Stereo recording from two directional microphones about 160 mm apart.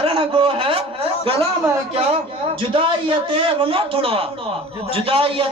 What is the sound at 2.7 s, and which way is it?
A man's voice, 35° right (ahead or behind).